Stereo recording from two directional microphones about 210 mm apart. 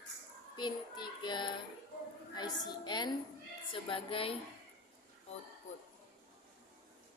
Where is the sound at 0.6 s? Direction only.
20° left (ahead or behind).